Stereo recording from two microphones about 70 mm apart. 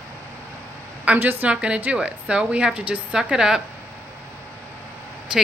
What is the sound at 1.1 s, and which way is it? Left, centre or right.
Speech, right.